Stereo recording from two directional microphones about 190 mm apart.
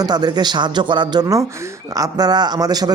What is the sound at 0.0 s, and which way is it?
Speech, 20° right (ahead or behind).